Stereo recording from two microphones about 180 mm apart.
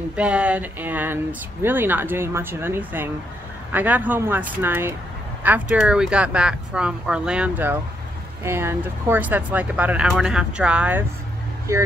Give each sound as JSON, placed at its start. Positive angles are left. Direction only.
{"t": 0.1, "sound": "speech", "side_deg": -5}